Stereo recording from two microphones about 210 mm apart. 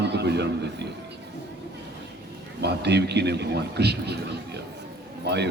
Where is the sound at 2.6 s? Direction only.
50° right (ahead or behind).